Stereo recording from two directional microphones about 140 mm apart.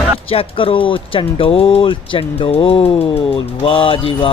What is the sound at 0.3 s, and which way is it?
Speech, 40° left (ahead or behind).